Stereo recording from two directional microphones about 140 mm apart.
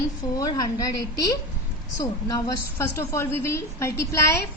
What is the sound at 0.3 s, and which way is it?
A woman's voice, 25° left (ahead or behind).